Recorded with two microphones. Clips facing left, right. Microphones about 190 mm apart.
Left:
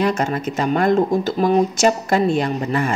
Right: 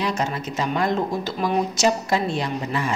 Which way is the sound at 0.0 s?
55° left (ahead or behind).